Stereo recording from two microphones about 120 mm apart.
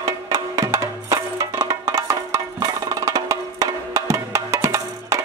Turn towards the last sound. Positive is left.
turn(degrees=-25)  # may be behind; listen again after turning